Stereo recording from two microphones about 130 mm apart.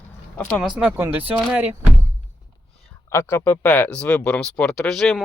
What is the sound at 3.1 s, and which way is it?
Speech, 20° left (ahead or behind).